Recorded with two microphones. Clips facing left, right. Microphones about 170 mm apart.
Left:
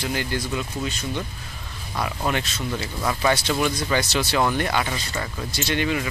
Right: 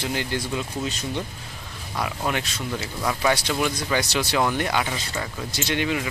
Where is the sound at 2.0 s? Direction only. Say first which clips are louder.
Left 1 dB; 10° right (ahead or behind).